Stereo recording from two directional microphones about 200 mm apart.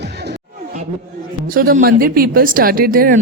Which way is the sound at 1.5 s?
45° right (ahead or behind).